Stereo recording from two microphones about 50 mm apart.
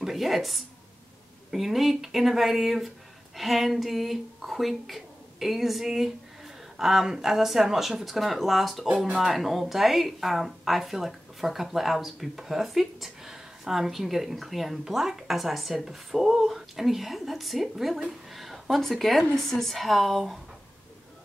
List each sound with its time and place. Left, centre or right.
0.0 s speech: centre
8.8 s speech: right
9.1 s speech: centre